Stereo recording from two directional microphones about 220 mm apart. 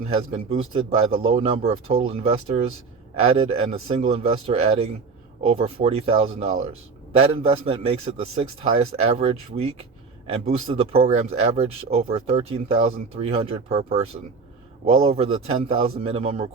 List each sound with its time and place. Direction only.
0.2 s speech: 25° right (ahead or behind)